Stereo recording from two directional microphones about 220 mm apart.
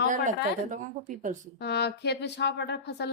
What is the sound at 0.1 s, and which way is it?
A woman's voice, 35° right (ahead or behind).